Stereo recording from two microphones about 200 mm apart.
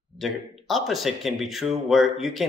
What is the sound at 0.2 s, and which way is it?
Speech, centre (ahead or behind).